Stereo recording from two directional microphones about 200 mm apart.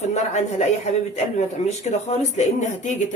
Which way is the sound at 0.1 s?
35° left (ahead or behind).